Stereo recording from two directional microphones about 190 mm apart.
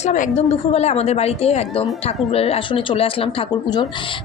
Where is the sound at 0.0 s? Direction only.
40° left (ahead or behind).